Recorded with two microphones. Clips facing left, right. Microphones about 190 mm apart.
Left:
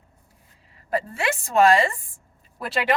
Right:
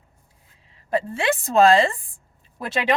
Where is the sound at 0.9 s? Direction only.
30° right (ahead or behind).